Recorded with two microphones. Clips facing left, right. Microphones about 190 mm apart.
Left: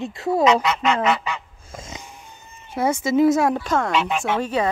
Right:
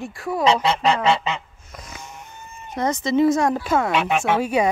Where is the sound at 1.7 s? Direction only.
25° left (ahead or behind).